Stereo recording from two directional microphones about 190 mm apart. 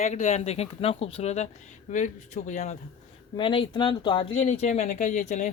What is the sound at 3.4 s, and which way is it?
Speech, 25° left (ahead or behind).